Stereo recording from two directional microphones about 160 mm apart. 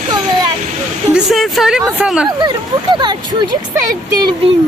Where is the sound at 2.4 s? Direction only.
25° right (ahead or behind).